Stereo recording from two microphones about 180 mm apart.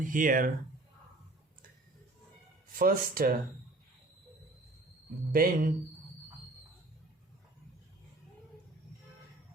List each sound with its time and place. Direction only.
0.0 s speech: 50° right (ahead or behind)
2.7 s speech: 50° right (ahead or behind)
5.3 s speech: 50° right (ahead or behind)